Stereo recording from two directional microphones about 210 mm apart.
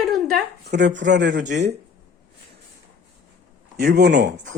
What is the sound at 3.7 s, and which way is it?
Speech, 50° right (ahead or behind).